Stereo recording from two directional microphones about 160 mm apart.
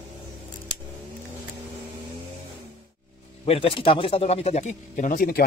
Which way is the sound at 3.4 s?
35° left (ahead or behind).